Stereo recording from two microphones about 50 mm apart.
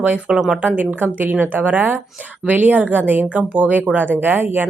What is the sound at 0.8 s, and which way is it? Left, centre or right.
Speech, right.